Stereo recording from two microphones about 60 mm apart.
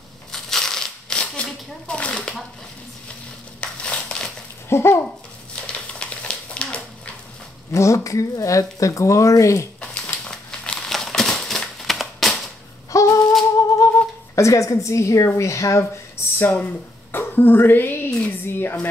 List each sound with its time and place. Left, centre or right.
0.3 s crumpling: centre
3.6 s crumpling: centre
4.6 s a child's voice: left
5.9 s a sound: centre
7.7 s speech: left
9.8 s a sound: centre
10.9 s crumpling: centre
12.9 s a sound: left
13.6 s humming: left
14.3 s speech: left
17.1 s a sound: left
18.2 s speech: left